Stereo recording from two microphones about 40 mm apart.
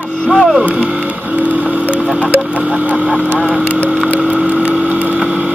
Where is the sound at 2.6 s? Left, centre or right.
Right.